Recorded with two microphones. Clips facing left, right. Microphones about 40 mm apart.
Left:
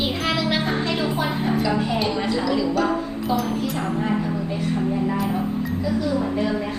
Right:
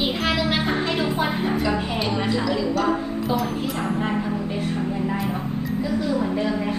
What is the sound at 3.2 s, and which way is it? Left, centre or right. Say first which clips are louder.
Speech: left 1 dB; centre.